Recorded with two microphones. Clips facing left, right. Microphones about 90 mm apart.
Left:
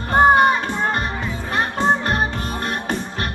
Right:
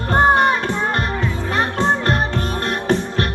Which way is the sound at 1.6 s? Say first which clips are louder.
Even; 5° left (ahead or behind).